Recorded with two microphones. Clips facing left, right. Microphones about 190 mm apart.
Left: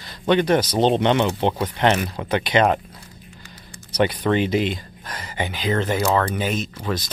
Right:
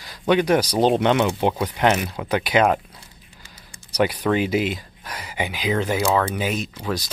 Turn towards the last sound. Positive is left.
turn(degrees=-10)  # may be behind; listen again after turning